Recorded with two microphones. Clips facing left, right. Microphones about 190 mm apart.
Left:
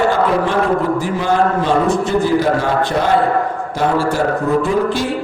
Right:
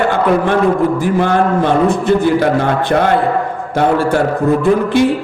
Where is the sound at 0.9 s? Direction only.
55° right (ahead or behind).